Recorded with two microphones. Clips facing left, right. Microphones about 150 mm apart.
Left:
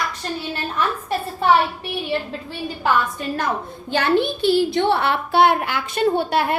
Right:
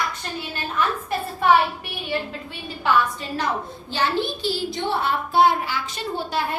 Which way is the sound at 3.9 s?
60° left (ahead or behind).